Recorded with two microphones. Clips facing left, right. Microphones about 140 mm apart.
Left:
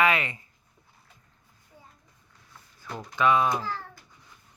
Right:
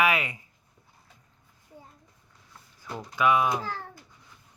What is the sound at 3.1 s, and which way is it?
Speech, 10° right (ahead or behind).